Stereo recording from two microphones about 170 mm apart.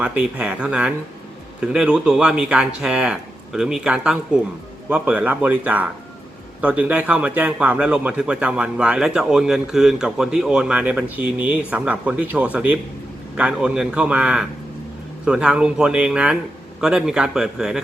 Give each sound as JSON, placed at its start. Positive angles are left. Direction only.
{"t": 0.0, "sound": "speech", "side_deg": -5}